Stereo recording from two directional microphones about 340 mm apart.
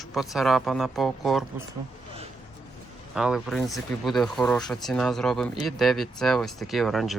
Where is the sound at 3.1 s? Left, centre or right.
Centre.